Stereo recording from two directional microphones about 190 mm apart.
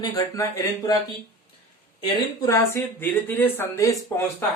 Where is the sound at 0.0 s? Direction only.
20° left (ahead or behind).